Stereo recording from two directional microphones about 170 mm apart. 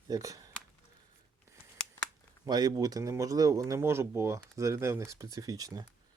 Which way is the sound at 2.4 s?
25° right (ahead or behind).